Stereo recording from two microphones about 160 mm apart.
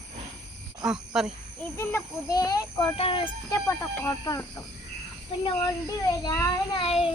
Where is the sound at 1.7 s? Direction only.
15° left (ahead or behind).